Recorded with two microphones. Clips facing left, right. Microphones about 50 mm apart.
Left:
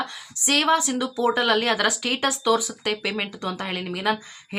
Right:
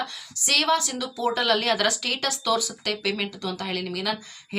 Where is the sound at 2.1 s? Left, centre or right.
Left.